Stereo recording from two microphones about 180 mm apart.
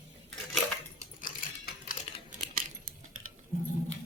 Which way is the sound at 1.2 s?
50° left (ahead or behind).